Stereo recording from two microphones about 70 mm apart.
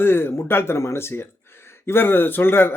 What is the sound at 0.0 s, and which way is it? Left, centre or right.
A man's voice, left.